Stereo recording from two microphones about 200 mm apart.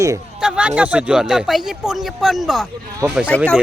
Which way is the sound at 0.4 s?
5° right (ahead or behind).